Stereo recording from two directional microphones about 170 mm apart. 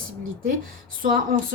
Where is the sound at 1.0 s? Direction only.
55° right (ahead or behind).